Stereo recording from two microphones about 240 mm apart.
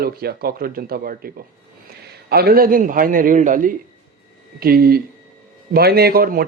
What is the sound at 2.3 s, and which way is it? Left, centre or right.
Speech, right.